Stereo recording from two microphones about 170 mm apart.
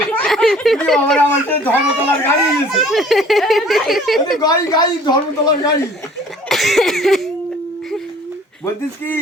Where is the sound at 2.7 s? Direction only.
Centre (ahead or behind).